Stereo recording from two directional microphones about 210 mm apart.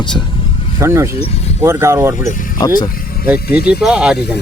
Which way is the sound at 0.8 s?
15° right (ahead or behind).